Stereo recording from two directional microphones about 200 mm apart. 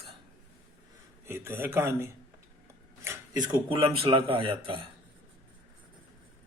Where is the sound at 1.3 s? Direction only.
10° right (ahead or behind).